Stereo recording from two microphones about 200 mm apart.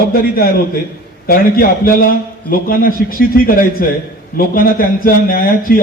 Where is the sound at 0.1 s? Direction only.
50° left (ahead or behind).